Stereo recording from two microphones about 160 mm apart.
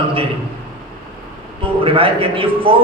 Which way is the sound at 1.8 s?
35° right (ahead or behind).